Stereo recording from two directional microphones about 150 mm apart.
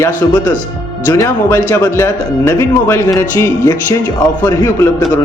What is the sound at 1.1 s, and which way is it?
Speech, 20° left (ahead or behind).